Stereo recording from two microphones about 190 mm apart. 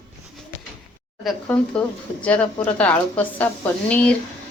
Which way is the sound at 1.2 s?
5° left (ahead or behind).